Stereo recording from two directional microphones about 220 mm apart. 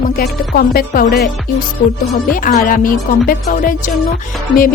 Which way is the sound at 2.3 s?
40° left (ahead or behind).